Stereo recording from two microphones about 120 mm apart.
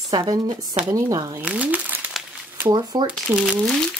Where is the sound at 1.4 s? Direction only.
10° right (ahead or behind).